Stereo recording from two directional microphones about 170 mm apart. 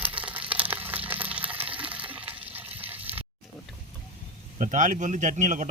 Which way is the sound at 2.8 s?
10° right (ahead or behind).